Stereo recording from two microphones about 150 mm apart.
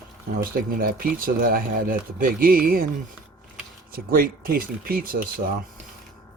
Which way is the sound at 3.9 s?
75° right (ahead or behind).